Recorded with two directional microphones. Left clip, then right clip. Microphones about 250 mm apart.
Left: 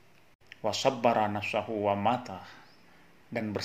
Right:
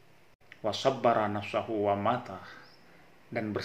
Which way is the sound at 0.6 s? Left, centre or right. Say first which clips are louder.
Left 1 dB; left.